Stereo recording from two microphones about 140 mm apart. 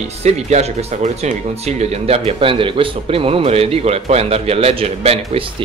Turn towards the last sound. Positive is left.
turn(degrees=-40)  # may be behind; listen again after turning